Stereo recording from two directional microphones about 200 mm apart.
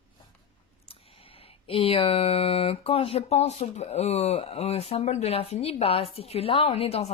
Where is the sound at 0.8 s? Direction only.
30° left (ahead or behind).